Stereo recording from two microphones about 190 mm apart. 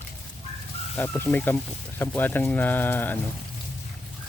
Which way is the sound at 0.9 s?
10° left (ahead or behind).